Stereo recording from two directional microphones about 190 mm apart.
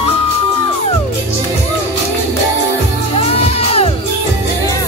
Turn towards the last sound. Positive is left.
turn(degrees=30)  # may be behind; listen again after turning